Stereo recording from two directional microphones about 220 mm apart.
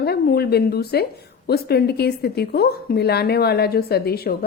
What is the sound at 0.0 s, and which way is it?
A woman's voice, 45° left (ahead or behind).